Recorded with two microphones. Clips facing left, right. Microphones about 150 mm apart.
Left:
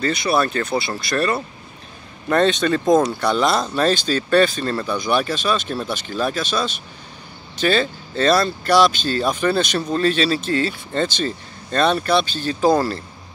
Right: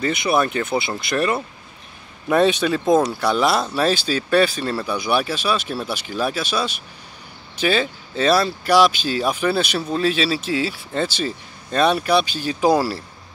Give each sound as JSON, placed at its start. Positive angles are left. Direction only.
{"t": 0.0, "sound": "speech", "side_deg": -15}